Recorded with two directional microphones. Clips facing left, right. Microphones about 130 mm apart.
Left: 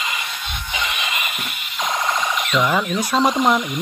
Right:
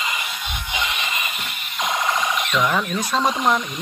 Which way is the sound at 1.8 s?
5° right (ahead or behind).